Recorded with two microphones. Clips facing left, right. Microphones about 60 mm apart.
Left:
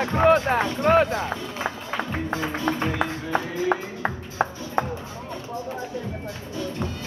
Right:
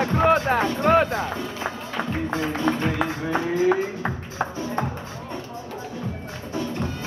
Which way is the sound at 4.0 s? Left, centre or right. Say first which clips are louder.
Left 2 dB; left.